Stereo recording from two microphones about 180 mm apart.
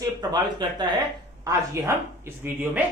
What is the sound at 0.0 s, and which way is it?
A man's voice, 20° right (ahead or behind).